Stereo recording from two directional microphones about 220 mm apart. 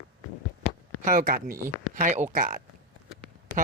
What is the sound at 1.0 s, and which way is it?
Speech, 40° right (ahead or behind).